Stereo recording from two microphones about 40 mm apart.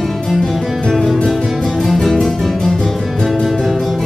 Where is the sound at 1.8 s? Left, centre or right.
Centre.